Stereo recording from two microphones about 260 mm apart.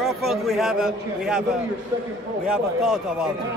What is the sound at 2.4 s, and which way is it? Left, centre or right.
Speech, centre.